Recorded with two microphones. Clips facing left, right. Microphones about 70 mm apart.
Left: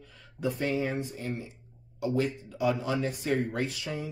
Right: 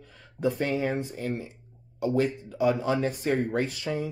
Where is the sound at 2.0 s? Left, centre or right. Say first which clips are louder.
Right 3 dB; right.